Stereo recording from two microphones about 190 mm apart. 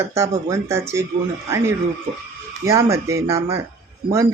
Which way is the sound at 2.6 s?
15° right (ahead or behind).